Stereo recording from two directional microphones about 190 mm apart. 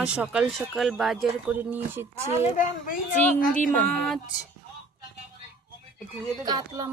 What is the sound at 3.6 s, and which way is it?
Speech, 5° left (ahead or behind).